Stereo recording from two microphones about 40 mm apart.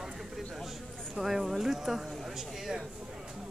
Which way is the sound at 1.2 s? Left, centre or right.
Centre.